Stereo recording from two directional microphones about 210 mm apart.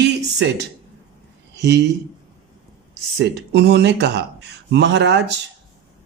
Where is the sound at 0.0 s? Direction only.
55° right (ahead or behind).